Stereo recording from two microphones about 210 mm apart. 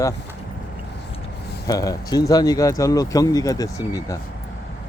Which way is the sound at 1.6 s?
15° left (ahead or behind).